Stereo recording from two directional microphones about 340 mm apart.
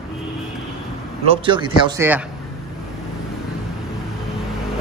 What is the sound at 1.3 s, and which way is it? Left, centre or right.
Speech, centre.